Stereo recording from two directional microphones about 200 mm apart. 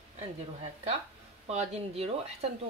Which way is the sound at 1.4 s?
30° right (ahead or behind).